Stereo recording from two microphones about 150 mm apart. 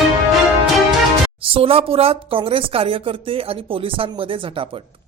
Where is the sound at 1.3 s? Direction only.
35° right (ahead or behind).